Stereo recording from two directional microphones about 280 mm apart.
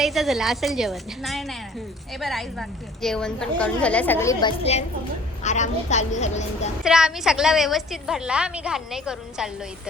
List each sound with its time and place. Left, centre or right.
0.0 s a woman's voice: centre; by 6.7 s left
6.8 s a woman's voice: centre